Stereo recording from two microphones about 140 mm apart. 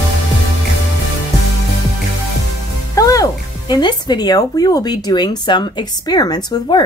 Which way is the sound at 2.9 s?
25° left (ahead or behind).